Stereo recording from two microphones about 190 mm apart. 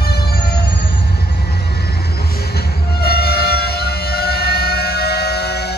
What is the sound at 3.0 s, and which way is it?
Civil defense siren, 55° left (ahead or behind).